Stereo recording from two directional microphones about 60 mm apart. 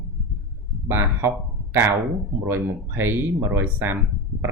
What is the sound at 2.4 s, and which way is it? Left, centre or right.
Speech, right.